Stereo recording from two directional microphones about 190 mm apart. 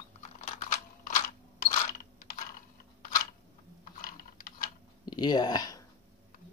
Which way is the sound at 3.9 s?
50° left (ahead or behind).